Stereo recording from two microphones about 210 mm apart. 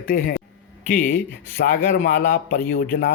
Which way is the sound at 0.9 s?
10° left (ahead or behind).